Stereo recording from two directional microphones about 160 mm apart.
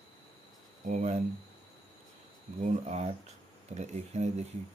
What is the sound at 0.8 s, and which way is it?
Speech, 50° right (ahead or behind).